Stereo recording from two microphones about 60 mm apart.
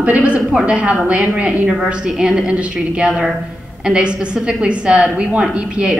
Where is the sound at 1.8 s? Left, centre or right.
Centre.